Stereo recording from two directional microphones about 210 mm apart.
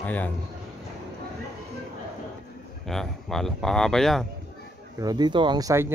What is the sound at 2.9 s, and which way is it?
Speech, centre (ahead or behind).